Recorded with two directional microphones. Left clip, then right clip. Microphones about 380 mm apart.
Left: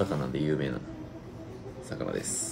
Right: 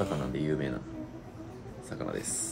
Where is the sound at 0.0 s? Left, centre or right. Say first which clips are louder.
Left 2 dB; centre.